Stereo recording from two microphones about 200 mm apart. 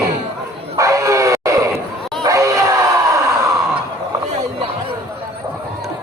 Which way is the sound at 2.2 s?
15° right (ahead or behind).